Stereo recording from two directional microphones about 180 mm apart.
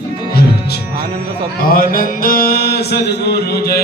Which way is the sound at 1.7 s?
50° left (ahead or behind).